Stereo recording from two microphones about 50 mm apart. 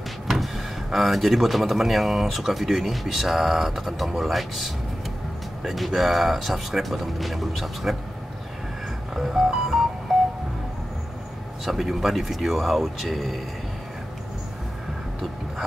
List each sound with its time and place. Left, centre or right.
0.9 s speech: centre
9.1 s music: centre
10.1 s wind chime: centre
11.6 s speech: centre